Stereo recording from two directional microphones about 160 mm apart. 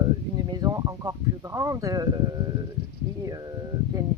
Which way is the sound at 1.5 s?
20° right (ahead or behind).